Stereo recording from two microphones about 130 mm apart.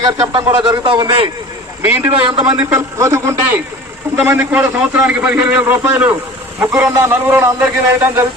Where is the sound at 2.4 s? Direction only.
30° right (ahead or behind); by 8.1 s 15° right (ahead or behind).